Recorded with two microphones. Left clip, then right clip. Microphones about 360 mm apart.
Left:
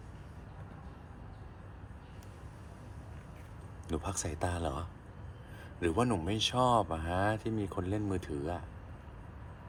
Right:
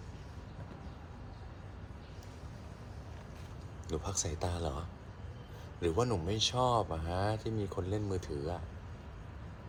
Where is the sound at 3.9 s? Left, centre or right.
Left.